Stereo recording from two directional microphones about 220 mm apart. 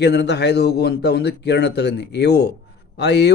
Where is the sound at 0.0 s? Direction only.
50° left (ahead or behind).